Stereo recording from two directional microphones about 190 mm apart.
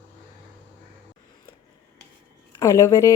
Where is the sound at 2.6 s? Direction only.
15° left (ahead or behind).